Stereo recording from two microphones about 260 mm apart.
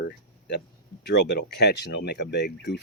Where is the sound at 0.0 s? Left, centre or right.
Left.